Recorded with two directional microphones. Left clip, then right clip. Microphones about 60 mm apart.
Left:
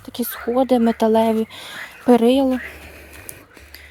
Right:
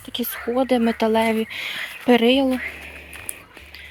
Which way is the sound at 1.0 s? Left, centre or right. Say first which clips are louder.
Left 3 dB; left.